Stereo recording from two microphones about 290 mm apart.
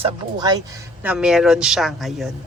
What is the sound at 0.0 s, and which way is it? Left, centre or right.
Speech, centre.